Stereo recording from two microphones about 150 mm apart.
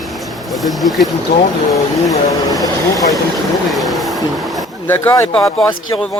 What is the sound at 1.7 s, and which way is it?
Speech, centre (ahead or behind).